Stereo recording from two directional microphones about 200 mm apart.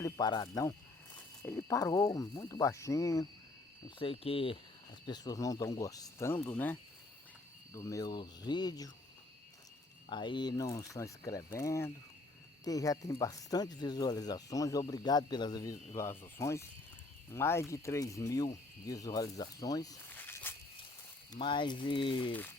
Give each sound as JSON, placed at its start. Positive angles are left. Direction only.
{"t": 0.0, "sound": "speech", "side_deg": 20}
{"t": 3.8, "sound": "speech", "side_deg": 25}
{"t": 10.1, "sound": "speech", "side_deg": 25}
{"t": 21.3, "sound": "speech", "side_deg": 25}